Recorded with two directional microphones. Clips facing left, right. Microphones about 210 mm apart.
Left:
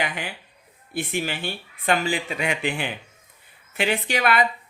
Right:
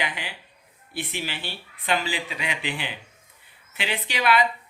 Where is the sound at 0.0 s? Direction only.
50° left (ahead or behind).